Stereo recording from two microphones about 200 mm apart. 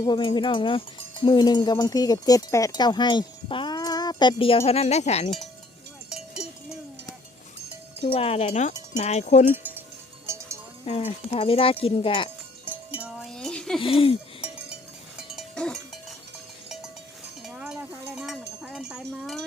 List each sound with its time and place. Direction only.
0.0 s cowbell: 25° left (ahead or behind)
6.1 s cowbell: 5° right (ahead or behind)
8.0 s cowbell: 30° left (ahead or behind)
9.5 s cowbell: 10° right (ahead or behind)
10.8 s cowbell: 30° left (ahead or behind)
12.6 s cowbell: 5° right (ahead or behind)
13.7 s cowbell: 25° left (ahead or behind)
15.4 s goat: 5° left (ahead or behind)
17.4 s cowbell: centre (ahead or behind)